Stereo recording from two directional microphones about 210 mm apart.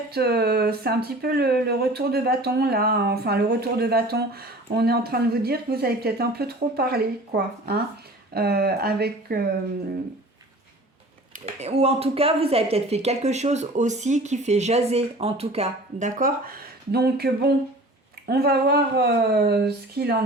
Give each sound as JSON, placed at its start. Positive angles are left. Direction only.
{"t": 0.1, "sound": "speech", "side_deg": -50}
{"t": 11.4, "sound": "speech", "side_deg": -30}